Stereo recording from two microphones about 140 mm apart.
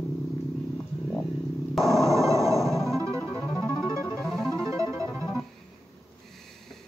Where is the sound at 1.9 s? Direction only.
25° right (ahead or behind).